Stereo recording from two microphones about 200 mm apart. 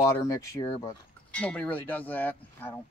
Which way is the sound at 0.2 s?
15° left (ahead or behind).